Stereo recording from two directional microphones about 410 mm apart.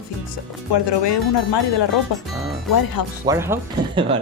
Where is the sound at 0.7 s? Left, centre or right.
Left.